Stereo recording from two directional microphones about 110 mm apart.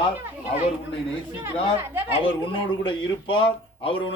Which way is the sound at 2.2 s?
50° left (ahead or behind).